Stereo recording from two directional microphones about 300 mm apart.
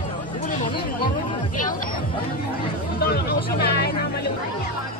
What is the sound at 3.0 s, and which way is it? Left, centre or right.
Speech, left.